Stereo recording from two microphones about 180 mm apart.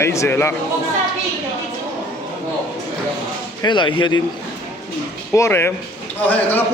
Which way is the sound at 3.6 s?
25° left (ahead or behind).